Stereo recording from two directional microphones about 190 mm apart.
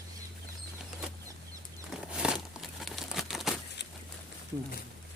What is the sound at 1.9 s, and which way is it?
Crumpling, 5° right (ahead or behind).